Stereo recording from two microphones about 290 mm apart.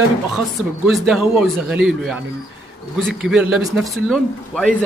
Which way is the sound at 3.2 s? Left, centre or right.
Centre.